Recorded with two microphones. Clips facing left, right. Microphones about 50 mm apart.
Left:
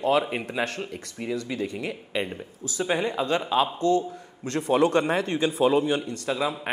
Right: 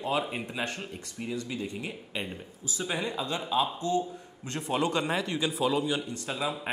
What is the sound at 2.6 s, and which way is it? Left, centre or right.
Speech, left.